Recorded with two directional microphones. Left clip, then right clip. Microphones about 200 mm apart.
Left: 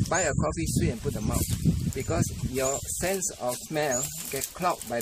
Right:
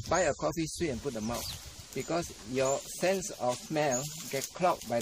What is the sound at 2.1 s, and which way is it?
Speech, 10° right (ahead or behind).